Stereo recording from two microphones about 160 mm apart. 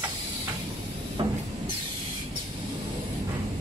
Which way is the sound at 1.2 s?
35° right (ahead or behind).